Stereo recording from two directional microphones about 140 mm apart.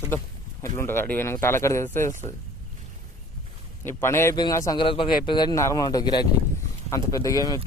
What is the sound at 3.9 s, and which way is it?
Speech, 15° left (ahead or behind).